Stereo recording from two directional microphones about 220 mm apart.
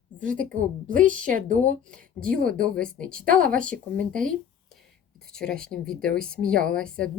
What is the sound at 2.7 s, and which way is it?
Speech, 5° left (ahead or behind).